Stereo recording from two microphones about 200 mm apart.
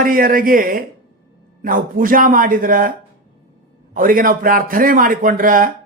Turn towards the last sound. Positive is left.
turn(degrees=-45)  # may be behind; listen again after turning